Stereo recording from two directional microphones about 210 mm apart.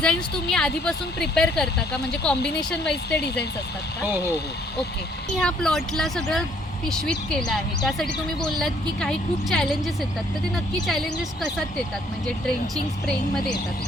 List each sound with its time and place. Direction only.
0.0 s speech: 5° left (ahead or behind)
2.9 s speech: 50° left (ahead or behind)
5.4 s speech: 5° left (ahead or behind)